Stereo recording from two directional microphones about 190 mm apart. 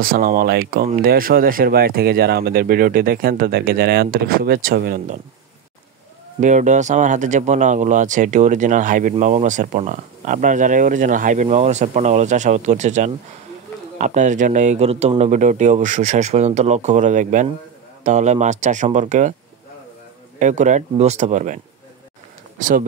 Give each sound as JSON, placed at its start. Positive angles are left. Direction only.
{"t": 0.0, "sound": "speech", "side_deg": -50}
{"t": 6.4, "sound": "speech", "side_deg": -40}
{"t": 20.3, "sound": "speech", "side_deg": -40}
{"t": 22.6, "sound": "speech", "side_deg": -45}